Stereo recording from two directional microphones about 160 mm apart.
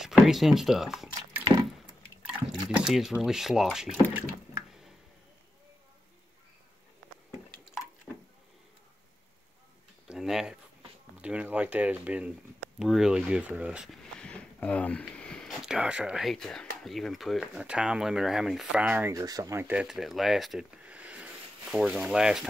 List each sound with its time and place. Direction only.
0.0 s speech: centre (ahead or behind)
1.4 s a sound: 25° right (ahead or behind)
2.7 s speech: 5° right (ahead or behind)
10.0 s a sound: 5° right (ahead or behind)
11.1 s speech: 10° right (ahead or behind)
14.2 s speech: 5° left (ahead or behind)